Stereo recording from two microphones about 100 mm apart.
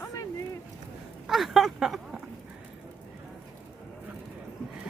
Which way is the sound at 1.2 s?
Centre (ahead or behind).